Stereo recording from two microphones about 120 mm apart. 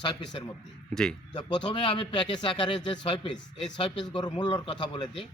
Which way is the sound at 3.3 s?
5° left (ahead or behind).